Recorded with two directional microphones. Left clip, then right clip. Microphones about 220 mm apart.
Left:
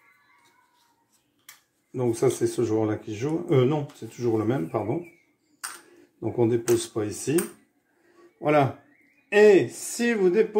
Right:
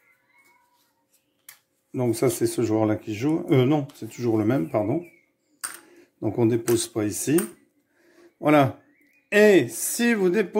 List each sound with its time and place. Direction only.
1.9 s speech: 50° right (ahead or behind)
6.1 s speech: 50° right (ahead or behind)
8.2 s a sound: 45° right (ahead or behind)
9.3 s speech: 45° right (ahead or behind)